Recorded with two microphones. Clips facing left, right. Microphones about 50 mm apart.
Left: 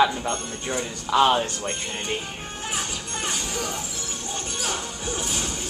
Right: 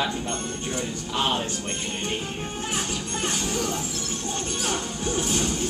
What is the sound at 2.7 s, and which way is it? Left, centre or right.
Music, centre.